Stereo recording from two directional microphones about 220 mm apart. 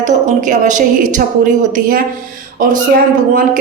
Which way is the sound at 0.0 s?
35° right (ahead or behind).